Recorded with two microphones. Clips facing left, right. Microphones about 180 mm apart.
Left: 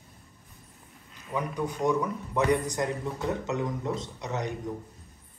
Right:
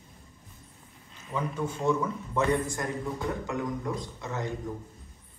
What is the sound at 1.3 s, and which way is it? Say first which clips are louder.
A man's voice: left 1 dB; 15° left (ahead or behind).